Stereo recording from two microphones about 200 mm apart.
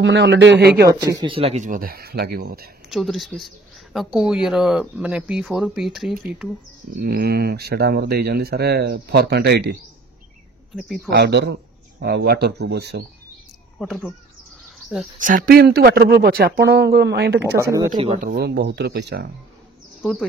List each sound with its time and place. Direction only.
0.0 s speech: 60° right (ahead or behind)
0.8 s speech: 20° right (ahead or behind); by 2.7 s 50° right (ahead or behind)
2.9 s speech: centre (ahead or behind)
7.0 s speech: 50° right (ahead or behind)
10.8 s speech: centre (ahead or behind)
11.1 s speech: 60° right (ahead or behind)
13.7 s speech: centre (ahead or behind)
15.1 s speech: 40° right (ahead or behind); by 17.6 s 55° right (ahead or behind)
17.6 s speech: 15° right (ahead or behind)
17.9 s speech: 30° right (ahead or behind)
18.2 s speech: 50° right (ahead or behind)
20.0 s speech: 5° left (ahead or behind)